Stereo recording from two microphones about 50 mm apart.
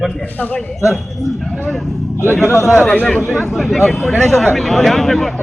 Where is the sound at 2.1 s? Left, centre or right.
Left.